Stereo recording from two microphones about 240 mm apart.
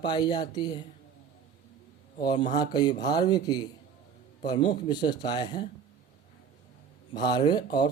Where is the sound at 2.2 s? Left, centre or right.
Centre.